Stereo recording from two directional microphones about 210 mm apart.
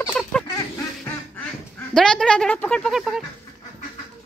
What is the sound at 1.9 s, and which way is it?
Speech, 5° left (ahead or behind).